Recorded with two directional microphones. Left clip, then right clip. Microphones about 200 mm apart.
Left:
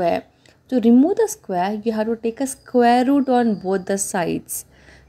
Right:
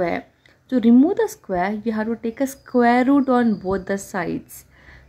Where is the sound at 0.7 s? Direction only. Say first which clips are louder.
Left 1 dB; 10° left (ahead or behind).